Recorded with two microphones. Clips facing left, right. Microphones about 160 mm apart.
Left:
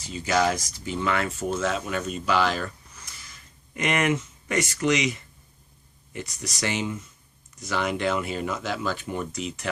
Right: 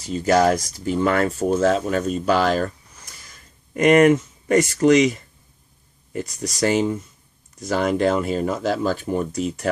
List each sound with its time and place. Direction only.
0.0 s speech: 45° right (ahead or behind)
3.1 s a sound: 45° right (ahead or behind)
6.1 s speech: 40° right (ahead or behind)